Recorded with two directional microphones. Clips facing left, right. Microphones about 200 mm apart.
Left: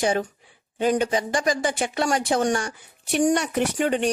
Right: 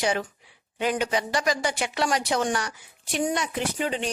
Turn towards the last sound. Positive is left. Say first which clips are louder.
# left 5 dB
turn(degrees=55)  # may be behind; listen again after turning